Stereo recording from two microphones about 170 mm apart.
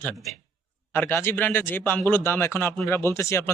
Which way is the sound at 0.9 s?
15° left (ahead or behind).